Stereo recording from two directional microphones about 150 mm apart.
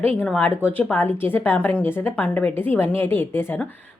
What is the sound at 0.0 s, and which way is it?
A woman's voice, 10° left (ahead or behind).